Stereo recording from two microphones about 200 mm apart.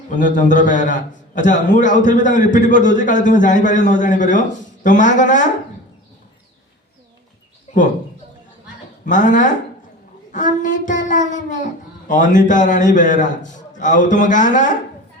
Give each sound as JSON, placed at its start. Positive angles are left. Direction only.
{"t": 0.2, "sound": "a child's voice", "side_deg": 40}
{"t": 7.7, "sound": "a sound", "side_deg": 35}
{"t": 9.0, "sound": "a child's voice", "side_deg": 40}